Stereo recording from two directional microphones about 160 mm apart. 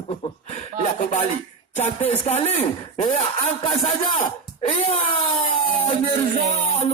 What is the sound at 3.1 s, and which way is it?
Music, 35° left (ahead or behind).